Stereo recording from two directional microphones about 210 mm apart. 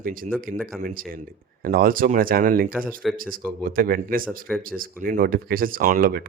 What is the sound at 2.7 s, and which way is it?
Speech, 5° right (ahead or behind).